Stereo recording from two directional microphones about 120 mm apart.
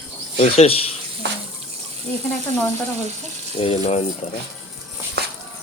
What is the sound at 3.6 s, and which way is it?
Speech, 60° left (ahead or behind).